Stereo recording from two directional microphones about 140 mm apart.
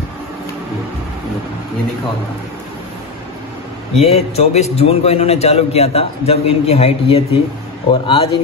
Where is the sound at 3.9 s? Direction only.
50° left (ahead or behind).